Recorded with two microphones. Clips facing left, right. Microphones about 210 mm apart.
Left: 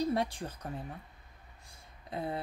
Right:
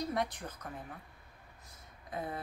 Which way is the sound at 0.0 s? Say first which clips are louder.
Left 4 dB; 30° left (ahead or behind).